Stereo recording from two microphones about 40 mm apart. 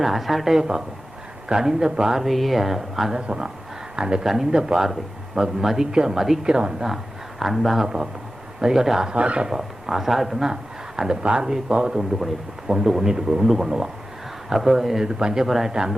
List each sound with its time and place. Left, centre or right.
0.0 s a man's voice: centre
2.2 s speech: centre
3.2 s speech: right
4.2 s a man's voice: centre
6.5 s speech: right
6.8 s speech: centre
7.9 s a man's voice: centre
9.1 s speech: right
9.5 s a man's voice: centre
10.5 s a sound: centre
11.2 s a man's voice: right; by 15.7 s centre